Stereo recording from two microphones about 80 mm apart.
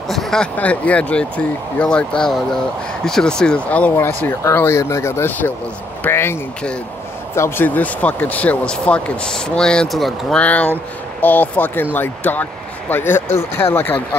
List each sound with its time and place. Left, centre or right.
0.1 s a sound: centre
0.6 s speech: centre
4.4 s speech: left
7.3 s speech: left; by 10.4 s centre
10.4 s speech: centre